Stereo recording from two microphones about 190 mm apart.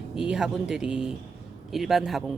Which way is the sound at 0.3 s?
5° right (ahead or behind).